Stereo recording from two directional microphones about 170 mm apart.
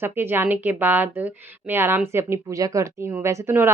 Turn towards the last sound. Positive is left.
turn(degrees=-15)  # may be behind; listen again after turning